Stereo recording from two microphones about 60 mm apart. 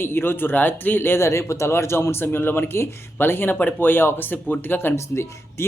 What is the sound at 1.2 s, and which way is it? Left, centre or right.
Speech, left.